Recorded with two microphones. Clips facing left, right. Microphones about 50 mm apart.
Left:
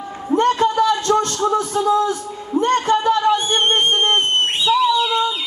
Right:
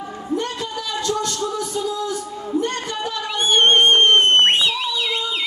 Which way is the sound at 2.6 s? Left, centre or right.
Left.